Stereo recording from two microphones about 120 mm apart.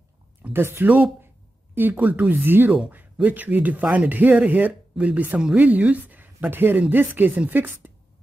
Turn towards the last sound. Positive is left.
turn(degrees=-15)  # may be behind; listen again after turning